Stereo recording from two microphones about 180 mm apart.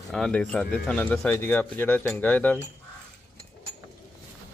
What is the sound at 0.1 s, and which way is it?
Speech, 5° left (ahead or behind).